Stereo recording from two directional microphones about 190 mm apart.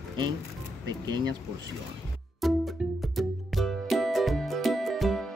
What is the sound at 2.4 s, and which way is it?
Music, centre (ahead or behind).